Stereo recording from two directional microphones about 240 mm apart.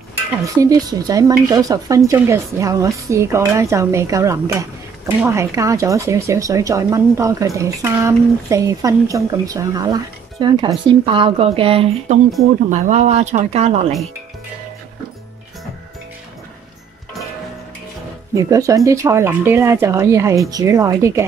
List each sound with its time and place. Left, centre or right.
0.6 s speech: centre
18.3 s speech: centre